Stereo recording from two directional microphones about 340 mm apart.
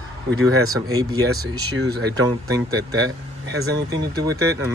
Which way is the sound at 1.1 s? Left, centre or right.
Centre.